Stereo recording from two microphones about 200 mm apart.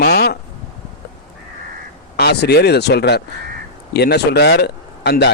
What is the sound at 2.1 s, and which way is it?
Speech, 55° left (ahead or behind).